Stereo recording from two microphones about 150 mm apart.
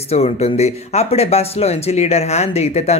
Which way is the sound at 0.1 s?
45° left (ahead or behind).